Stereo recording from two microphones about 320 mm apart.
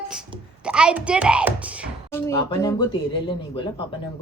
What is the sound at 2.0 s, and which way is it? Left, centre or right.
Speech, centre.